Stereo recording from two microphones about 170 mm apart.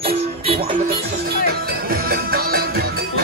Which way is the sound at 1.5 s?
65° right (ahead or behind).